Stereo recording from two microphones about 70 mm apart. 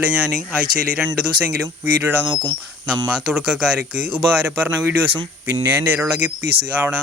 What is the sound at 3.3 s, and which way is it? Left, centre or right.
Speech, centre.